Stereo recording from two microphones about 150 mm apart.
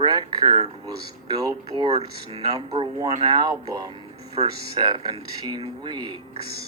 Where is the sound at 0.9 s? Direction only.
25° right (ahead or behind).